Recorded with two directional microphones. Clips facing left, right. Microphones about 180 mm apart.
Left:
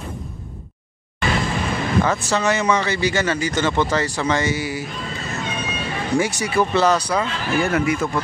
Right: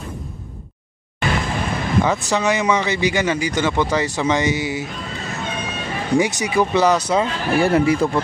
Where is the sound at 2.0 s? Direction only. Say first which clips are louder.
Right 1 dB; 15° right (ahead or behind).